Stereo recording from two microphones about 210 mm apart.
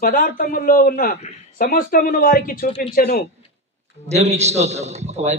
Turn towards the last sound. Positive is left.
turn(degrees=-30)  # may be behind; listen again after turning